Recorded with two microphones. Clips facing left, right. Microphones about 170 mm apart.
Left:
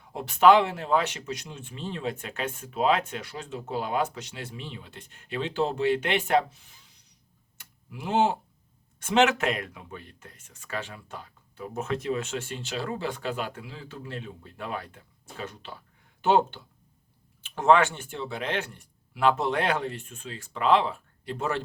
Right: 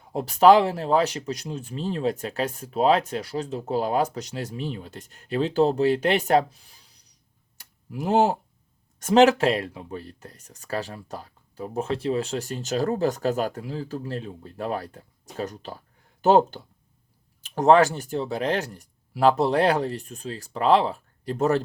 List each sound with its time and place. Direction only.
0.1 s speech: 35° right (ahead or behind)
7.6 s tick-tock: 40° right (ahead or behind)
9.0 s speech: 40° right (ahead or behind)